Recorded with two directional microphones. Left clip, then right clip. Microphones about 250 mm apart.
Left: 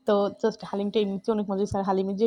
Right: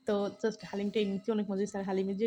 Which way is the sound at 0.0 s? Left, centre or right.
Centre.